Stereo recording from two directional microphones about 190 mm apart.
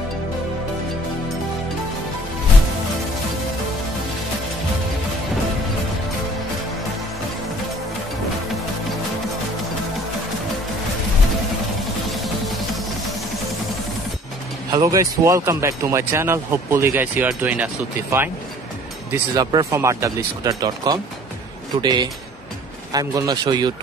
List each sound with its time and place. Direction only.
14.7 s speech: 20° right (ahead or behind)
19.1 s a man's voice: 20° right (ahead or behind)